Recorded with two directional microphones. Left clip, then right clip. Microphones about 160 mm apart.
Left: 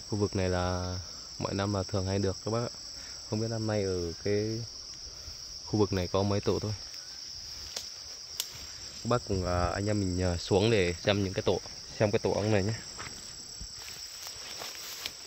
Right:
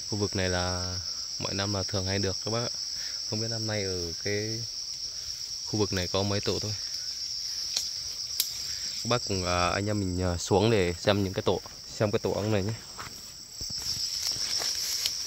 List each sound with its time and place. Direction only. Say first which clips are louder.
0.1 s cricket: right 1 dB; 5° right (ahead or behind)
3.3 s cricket: left 2 dB; 10° left (ahead or behind)
5.7 s cricket: even; 5° left (ahead or behind)
9.0 s speech: right 1 dB; 15° right (ahead or behind); by 11.6 s 40° right (ahead or behind)
12.0 s speech: even; 30° right (ahead or behind)
14.2 s cricket: right 9 dB; centre (ahead or behind)